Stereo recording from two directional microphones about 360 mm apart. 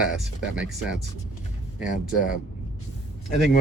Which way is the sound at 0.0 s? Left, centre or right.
Centre.